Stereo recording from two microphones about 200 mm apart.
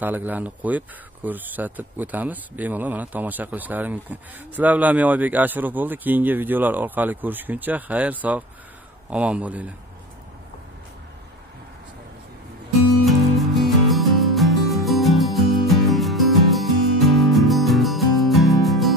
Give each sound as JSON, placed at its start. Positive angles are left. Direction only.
{"t": 0.0, "sound": "speech", "side_deg": -10}
{"t": 13.6, "sound": "music", "side_deg": 0}